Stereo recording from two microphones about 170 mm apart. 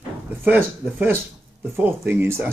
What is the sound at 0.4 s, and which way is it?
Speech, 10° right (ahead or behind).